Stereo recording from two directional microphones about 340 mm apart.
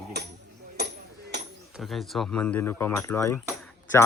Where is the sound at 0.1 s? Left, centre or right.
Right.